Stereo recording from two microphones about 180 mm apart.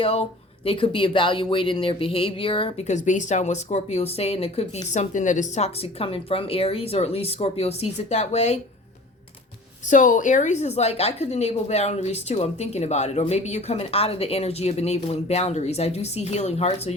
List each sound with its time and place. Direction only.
0.0 s speech: 30° left (ahead or behind)
9.9 s speech: 45° left (ahead or behind)